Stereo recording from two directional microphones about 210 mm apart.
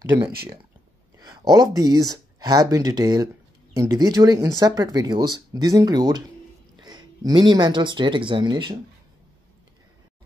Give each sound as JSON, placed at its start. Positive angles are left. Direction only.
{"t": 1.3, "sound": "speech", "side_deg": -20}